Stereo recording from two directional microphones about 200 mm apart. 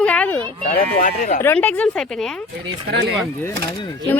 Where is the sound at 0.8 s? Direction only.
40° left (ahead or behind).